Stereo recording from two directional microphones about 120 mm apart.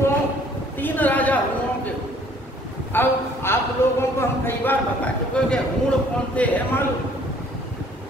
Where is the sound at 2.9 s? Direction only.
20° left (ahead or behind).